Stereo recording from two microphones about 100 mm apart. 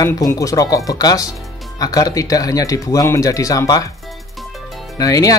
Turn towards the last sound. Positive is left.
turn(degrees=35)  # may be behind; listen again after turning